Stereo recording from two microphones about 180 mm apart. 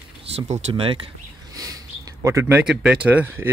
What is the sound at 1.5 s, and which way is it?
Bird, 20° right (ahead or behind).